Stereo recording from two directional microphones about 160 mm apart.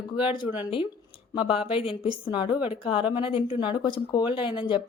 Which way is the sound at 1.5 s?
35° left (ahead or behind).